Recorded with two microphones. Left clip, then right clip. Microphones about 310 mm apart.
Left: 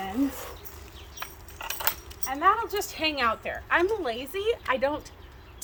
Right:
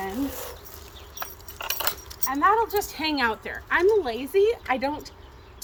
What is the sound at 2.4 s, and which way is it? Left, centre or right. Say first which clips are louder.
A woman's voice: right 3 dB; centre.